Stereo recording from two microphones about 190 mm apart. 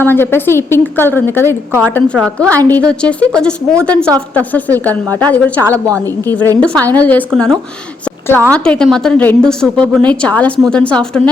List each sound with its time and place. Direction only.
0.0 s a woman's voice: 10° left (ahead or behind)
5.8 s a woman's voice: 20° right (ahead or behind)
6.6 s a woman's voice: 5° left (ahead or behind)